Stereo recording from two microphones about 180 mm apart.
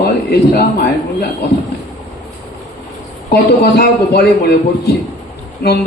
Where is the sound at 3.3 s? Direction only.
60° left (ahead or behind).